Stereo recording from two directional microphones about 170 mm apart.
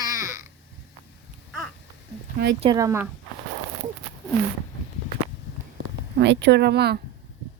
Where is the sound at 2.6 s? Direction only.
20° right (ahead or behind).